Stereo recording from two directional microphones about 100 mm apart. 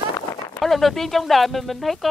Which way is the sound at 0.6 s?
Centre (ahead or behind).